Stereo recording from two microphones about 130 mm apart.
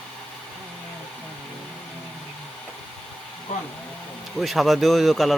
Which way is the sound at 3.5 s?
70° left (ahead or behind).